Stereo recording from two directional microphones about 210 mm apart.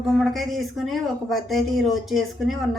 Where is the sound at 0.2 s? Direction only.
Centre (ahead or behind).